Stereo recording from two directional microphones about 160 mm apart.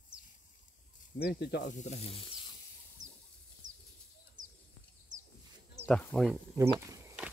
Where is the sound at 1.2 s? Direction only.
80° left.